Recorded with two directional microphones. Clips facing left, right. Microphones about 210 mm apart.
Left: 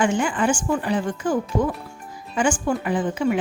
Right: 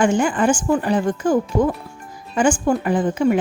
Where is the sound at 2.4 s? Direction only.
45° right (ahead or behind).